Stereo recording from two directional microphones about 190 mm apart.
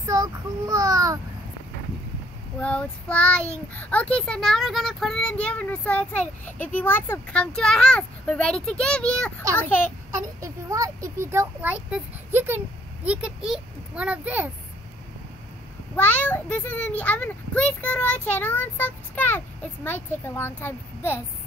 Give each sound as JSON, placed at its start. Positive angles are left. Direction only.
{"t": 0.0, "sound": "child singing", "side_deg": -15}
{"t": 2.6, "sound": "a child's voice", "side_deg": 5}
{"t": 10.4, "sound": "a child's voice", "side_deg": -15}
{"t": 16.0, "sound": "a child's voice", "side_deg": 10}